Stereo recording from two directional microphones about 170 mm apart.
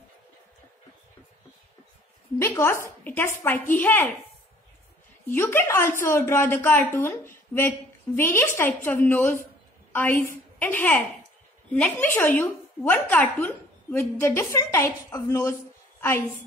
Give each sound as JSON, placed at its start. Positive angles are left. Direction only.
{"t": 2.3, "sound": "a woman's voice", "side_deg": 15}
{"t": 5.2, "sound": "a woman's voice", "side_deg": 15}